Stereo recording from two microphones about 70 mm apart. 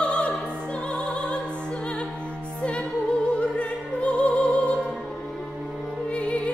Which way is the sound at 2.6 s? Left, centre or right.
Centre.